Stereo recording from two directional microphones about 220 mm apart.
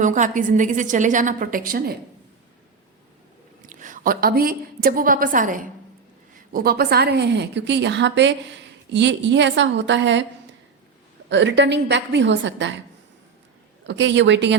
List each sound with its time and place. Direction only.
0.0 s a woman's voice: 35° right (ahead or behind)
3.7 s a woman's voice: 35° right (ahead or behind); by 10.2 s 55° right (ahead or behind)
11.3 s a woman's voice: 55° right (ahead or behind)
13.8 s a woman's voice: 55° right (ahead or behind)